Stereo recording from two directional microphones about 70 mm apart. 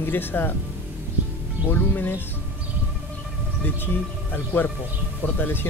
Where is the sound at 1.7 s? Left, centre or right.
Left.